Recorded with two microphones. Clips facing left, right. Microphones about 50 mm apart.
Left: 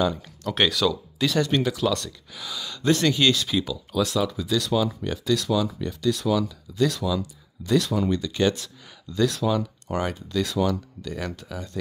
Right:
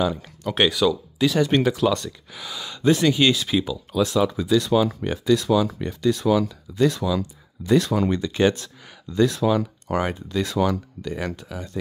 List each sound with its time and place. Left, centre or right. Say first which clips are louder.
0.0 s speech: right 1 dB; centre
1.6 s speech: right 4 dB; right
11.1 s speech: right 3 dB; centre